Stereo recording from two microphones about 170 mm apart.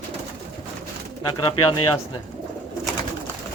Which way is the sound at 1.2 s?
25° left (ahead or behind).